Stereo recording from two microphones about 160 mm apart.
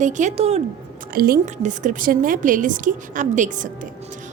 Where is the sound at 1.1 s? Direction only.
70° right (ahead or behind).